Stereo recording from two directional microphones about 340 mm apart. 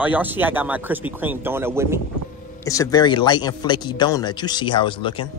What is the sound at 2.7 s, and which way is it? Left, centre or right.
Speech, centre.